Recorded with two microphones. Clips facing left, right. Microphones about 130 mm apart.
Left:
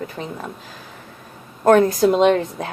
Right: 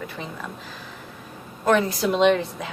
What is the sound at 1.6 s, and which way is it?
Speech, 45° left (ahead or behind).